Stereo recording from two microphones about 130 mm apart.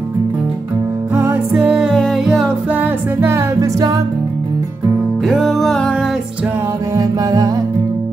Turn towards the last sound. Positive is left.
turn(degrees=-25)  # may be behind; listen again after turning